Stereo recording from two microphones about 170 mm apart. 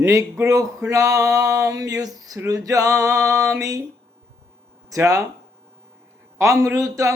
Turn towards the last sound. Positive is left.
turn(degrees=-20)  # may be behind; listen again after turning